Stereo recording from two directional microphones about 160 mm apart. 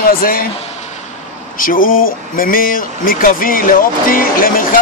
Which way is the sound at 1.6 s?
60° left (ahead or behind).